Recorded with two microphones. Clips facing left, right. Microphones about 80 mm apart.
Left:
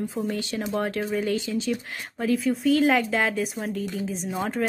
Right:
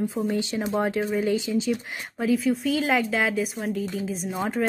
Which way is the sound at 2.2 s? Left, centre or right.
Centre.